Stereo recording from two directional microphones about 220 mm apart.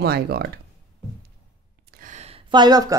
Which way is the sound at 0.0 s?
45° right (ahead or behind).